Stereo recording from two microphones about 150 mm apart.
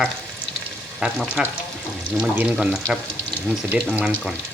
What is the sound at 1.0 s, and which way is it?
Speech, 5° right (ahead or behind).